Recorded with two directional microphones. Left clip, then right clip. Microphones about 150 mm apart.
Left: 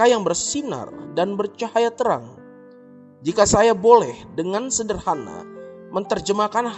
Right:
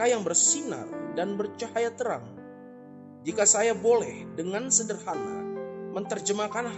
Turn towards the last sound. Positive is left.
turn(degrees=45)  # may be behind; listen again after turning